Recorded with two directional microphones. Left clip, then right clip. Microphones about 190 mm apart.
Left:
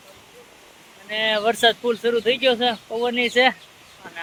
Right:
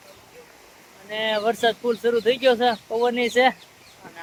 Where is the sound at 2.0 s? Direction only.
25° right (ahead or behind).